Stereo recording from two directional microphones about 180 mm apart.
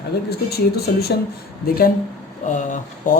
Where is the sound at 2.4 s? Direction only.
45° left (ahead or behind).